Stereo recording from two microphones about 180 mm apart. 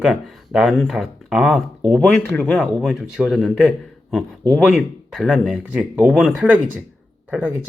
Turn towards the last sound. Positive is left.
turn(degrees=-10)  # may be behind; listen again after turning